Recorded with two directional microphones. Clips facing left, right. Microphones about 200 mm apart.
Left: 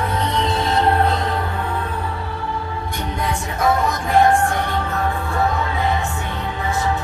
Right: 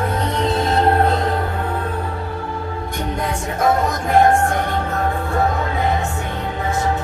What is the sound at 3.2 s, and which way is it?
Music, 45° right (ahead or behind).